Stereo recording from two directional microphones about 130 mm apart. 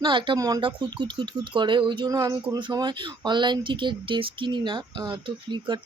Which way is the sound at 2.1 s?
25° right (ahead or behind).